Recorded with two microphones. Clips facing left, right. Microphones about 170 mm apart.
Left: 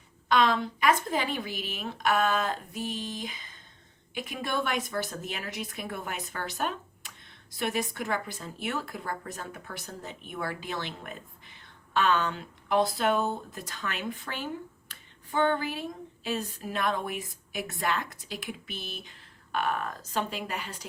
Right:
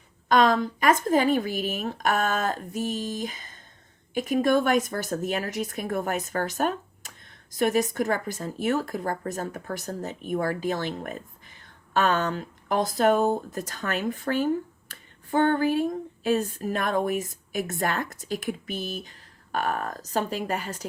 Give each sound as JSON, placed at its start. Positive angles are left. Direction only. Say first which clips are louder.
{"t": 0.3, "sound": "speech", "louder": "right 4 dB", "side_deg": -45}